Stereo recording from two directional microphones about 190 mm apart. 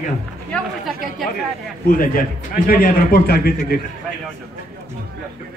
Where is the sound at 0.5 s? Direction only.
Centre (ahead or behind).